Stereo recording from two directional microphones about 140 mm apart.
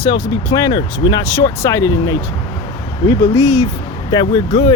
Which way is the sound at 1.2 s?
20° left (ahead or behind).